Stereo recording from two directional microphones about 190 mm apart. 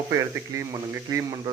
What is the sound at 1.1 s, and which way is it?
Speech, 15° right (ahead or behind).